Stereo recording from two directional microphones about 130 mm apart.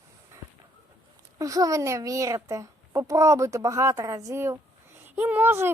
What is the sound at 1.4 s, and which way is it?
A child's voice, 25° right (ahead or behind).